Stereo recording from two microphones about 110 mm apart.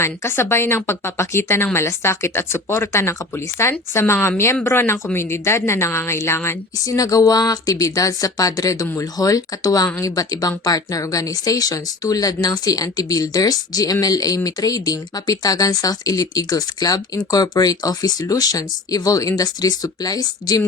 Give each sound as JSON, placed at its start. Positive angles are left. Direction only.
{"t": 0.0, "sound": "speech", "side_deg": 20}